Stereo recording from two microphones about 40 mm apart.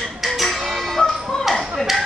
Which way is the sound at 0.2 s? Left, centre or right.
Centre.